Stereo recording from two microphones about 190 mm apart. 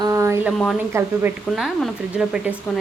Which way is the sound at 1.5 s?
Centre (ahead or behind).